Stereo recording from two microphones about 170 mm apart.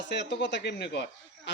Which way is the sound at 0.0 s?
90° left.